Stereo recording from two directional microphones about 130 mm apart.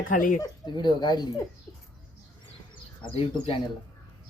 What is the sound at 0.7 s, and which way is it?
Speech, 35° left (ahead or behind).